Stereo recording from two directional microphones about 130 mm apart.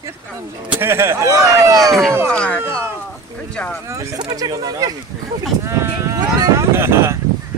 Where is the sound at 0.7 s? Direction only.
20° right (ahead or behind).